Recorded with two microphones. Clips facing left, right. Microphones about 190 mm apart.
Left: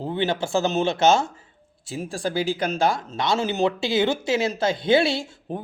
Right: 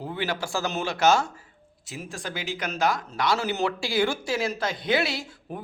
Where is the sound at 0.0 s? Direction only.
25° left (ahead or behind).